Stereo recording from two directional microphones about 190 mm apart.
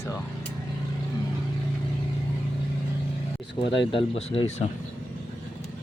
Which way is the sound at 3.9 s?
30° left (ahead or behind).